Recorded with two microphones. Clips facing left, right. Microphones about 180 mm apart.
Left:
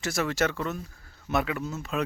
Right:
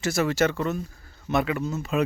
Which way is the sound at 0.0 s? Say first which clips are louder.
Right 4 dB; centre (ahead or behind).